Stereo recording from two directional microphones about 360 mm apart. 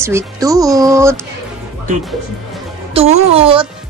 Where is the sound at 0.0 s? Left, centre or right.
Centre.